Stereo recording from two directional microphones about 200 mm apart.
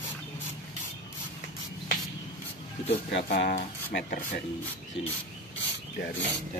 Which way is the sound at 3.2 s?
45° left (ahead or behind).